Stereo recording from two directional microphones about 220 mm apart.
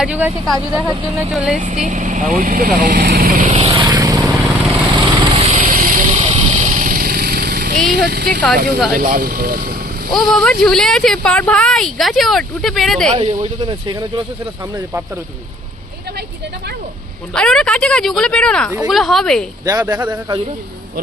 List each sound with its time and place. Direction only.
0.0 s speech: 5° right (ahead or behind)
1.6 s speech: 35° right (ahead or behind)
3.7 s vehicle: 20° right (ahead or behind); by 8.4 s 45° right (ahead or behind)
8.5 s speech: 45° right (ahead or behind)
10.1 s speech: centre (ahead or behind)
13.3 s speech: 20° right (ahead or behind)
17.3 s speech: 5° left (ahead or behind)
19.6 s speech: 15° right (ahead or behind)